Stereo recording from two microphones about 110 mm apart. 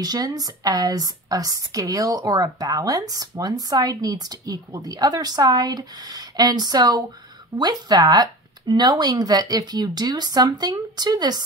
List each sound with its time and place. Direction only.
0.0 s speech: 35° right (ahead or behind)